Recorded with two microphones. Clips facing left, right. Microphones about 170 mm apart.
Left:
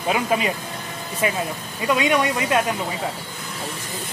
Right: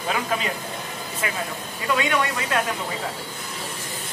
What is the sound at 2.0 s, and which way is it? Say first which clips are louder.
Speech: left 4 dB; 20° left (ahead or behind).